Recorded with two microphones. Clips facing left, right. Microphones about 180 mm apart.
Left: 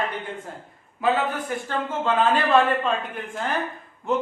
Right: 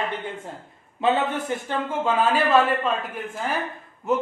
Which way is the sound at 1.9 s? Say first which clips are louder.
Left 1 dB; 10° right (ahead or behind).